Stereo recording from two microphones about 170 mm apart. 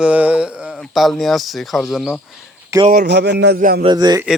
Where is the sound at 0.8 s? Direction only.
Centre (ahead or behind).